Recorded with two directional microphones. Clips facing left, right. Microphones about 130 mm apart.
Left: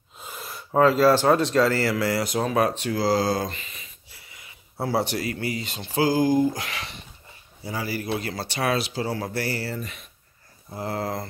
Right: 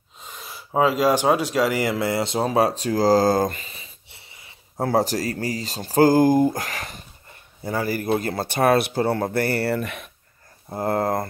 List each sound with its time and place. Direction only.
0.2 s speech: centre (ahead or behind); by 4.6 s 25° right (ahead or behind)
4.7 s speech: 40° right (ahead or behind); by 10.1 s 60° right (ahead or behind)
10.7 s speech: 50° right (ahead or behind)